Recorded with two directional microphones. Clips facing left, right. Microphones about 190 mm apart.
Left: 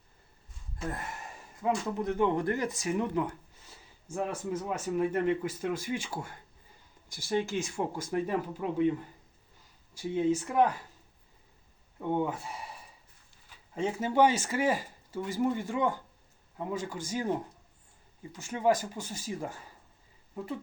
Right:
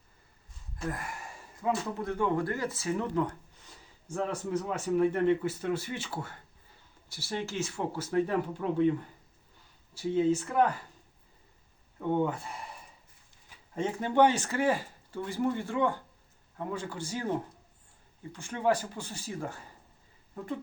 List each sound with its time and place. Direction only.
0.9 s speech: 25° left (ahead or behind)
10.2 s speech: 10° left (ahead or behind)
11.9 s speech: 10° left (ahead or behind)
13.7 s speech: 5° left (ahead or behind)